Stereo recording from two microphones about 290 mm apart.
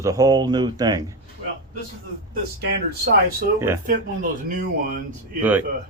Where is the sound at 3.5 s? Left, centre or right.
Centre.